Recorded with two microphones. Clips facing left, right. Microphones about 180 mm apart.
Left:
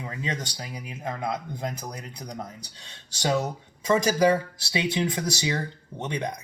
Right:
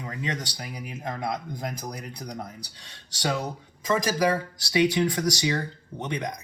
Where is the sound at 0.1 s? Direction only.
30° left (ahead or behind).